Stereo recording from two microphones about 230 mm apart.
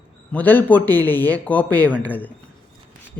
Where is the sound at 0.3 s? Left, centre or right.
Centre.